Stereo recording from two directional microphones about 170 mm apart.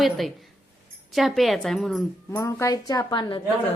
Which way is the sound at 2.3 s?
20° left (ahead or behind).